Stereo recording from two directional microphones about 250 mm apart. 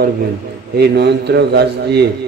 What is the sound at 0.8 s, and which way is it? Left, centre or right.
A man's voice, right.